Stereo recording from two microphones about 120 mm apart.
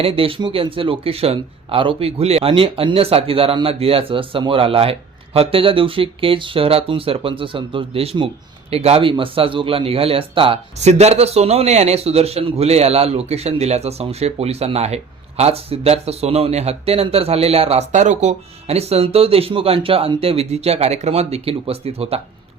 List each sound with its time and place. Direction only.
0.0 s speech: 50° right (ahead or behind)
10.8 s a man's voice: 65° right (ahead or behind)